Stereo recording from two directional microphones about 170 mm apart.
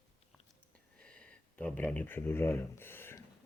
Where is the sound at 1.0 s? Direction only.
5° left (ahead or behind).